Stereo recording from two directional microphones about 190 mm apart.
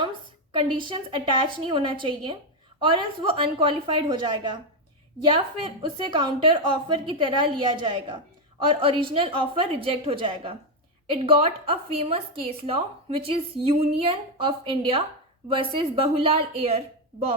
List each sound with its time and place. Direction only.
0.0 s a woman's voice: 25° right (ahead or behind)